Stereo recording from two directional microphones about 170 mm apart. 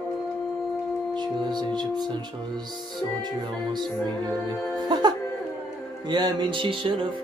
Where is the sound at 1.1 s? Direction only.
25° right (ahead or behind).